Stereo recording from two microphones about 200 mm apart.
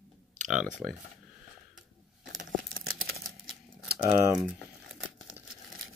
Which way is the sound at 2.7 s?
90° right.